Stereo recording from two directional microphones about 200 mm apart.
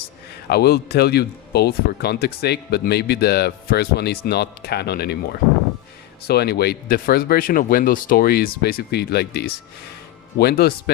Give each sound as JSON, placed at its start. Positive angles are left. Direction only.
{"t": 0.4, "sound": "speech", "side_deg": 55}
{"t": 6.2, "sound": "speech", "side_deg": 55}